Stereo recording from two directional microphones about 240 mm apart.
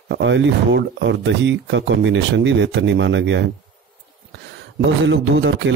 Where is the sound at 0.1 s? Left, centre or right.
Right.